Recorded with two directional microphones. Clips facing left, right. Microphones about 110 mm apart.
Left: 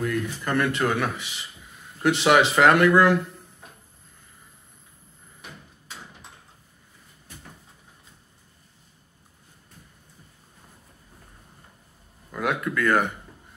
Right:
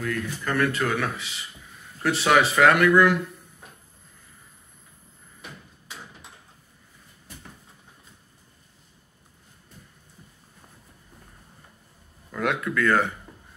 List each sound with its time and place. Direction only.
0.0 s speech: 20° left (ahead or behind)
12.3 s speech: 10° left (ahead or behind)